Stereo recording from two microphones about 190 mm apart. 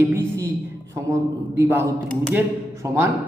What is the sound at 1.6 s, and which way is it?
Speech, 15° right (ahead or behind).